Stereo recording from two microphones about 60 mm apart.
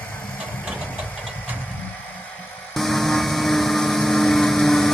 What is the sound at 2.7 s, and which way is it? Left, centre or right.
Vehicle, centre.